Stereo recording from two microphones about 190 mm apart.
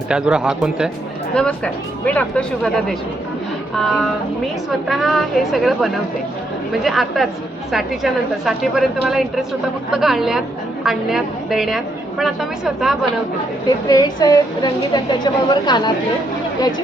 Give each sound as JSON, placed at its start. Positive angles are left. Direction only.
{"t": 0.1, "sound": "a woman's voice", "side_deg": -5}
{"t": 3.8, "sound": "a woman's voice", "side_deg": 0}
{"t": 13.8, "sound": "a woman's voice", "side_deg": 20}